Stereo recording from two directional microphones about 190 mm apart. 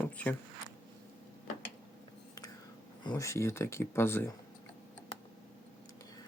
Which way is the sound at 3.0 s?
20° left (ahead or behind).